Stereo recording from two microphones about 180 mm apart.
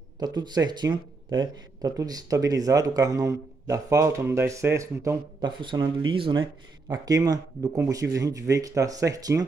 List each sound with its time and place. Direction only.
0.2 s speech: 25° right (ahead or behind)